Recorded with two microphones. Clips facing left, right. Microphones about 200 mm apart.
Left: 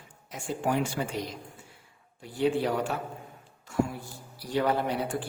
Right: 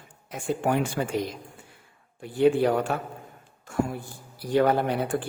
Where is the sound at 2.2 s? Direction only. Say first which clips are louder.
Right 6 dB; 55° right (ahead or behind).